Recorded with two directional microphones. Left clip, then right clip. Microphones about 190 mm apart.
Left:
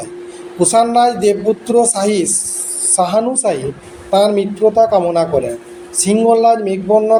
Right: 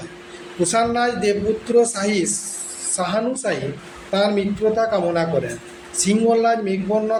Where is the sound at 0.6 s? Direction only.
15° left (ahead or behind).